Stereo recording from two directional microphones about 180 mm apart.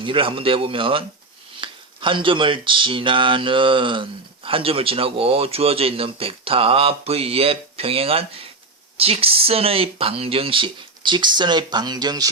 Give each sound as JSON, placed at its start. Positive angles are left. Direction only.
{"t": 0.0, "sound": "speech", "side_deg": -30}